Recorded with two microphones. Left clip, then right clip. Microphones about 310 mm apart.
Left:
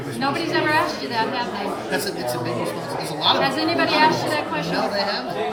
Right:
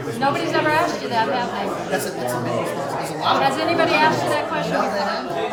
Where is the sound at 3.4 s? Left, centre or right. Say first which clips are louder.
Right 2 dB; centre.